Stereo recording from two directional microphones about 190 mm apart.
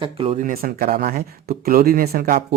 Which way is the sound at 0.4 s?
50° right (ahead or behind).